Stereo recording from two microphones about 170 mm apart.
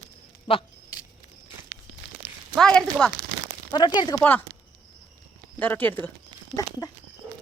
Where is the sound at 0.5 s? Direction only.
35° left (ahead or behind).